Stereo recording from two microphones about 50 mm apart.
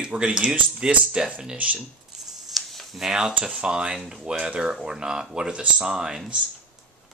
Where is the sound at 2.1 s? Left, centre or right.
Centre.